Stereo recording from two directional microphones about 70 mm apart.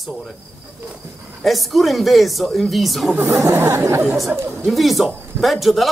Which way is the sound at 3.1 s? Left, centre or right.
Right.